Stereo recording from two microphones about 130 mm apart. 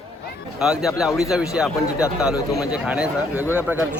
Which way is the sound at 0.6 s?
5° right (ahead or behind).